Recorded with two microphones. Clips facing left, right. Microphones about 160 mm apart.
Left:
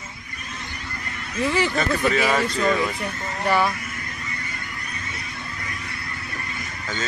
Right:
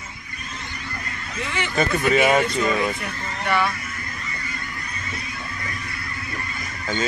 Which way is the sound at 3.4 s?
35° left (ahead or behind).